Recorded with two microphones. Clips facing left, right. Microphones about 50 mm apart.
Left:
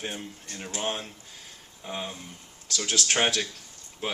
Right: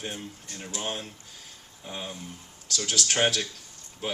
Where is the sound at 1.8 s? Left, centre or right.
Centre.